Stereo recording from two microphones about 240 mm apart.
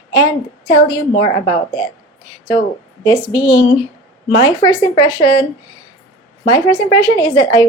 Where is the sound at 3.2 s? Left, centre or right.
Centre.